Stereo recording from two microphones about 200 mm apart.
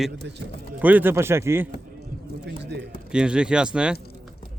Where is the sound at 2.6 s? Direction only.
55° right (ahead or behind).